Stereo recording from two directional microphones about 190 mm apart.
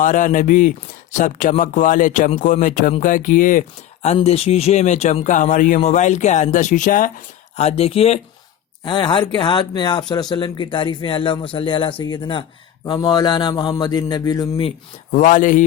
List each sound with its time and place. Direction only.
0.0 s speech: 45° left (ahead or behind)
4.0 s speech: 35° left (ahead or behind)
15.1 s speech: 45° left (ahead or behind)